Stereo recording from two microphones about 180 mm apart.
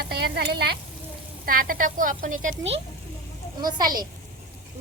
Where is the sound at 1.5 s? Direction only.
50° right (ahead or behind).